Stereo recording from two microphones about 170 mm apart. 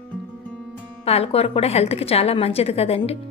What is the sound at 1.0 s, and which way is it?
A woman's voice, 35° left (ahead or behind).